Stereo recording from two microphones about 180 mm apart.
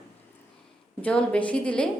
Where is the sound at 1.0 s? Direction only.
5° left (ahead or behind).